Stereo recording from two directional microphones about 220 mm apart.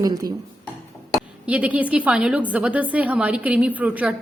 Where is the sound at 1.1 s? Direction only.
5° right (ahead or behind).